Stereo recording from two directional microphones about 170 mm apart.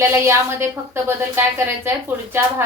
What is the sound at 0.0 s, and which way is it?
A woman's voice, 15° right (ahead or behind).